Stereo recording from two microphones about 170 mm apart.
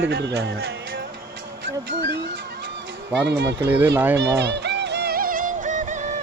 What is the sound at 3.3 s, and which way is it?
Speech, 90° right.